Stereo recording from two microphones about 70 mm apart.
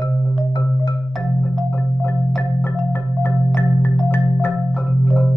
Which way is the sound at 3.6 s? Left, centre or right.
Left.